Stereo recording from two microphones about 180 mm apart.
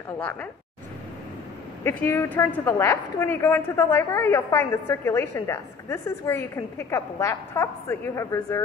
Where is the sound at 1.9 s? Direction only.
10° left (ahead or behind).